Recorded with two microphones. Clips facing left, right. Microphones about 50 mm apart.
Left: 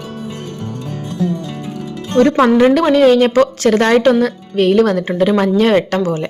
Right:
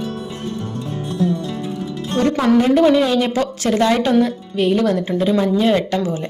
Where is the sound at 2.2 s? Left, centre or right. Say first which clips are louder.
Left 6 dB; left.